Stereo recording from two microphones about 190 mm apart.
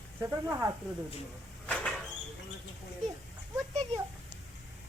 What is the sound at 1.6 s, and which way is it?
Cupboard open or close, 5° left (ahead or behind).